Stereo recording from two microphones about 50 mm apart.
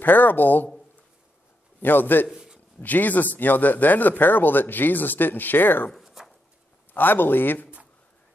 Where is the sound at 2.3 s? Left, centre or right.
Centre.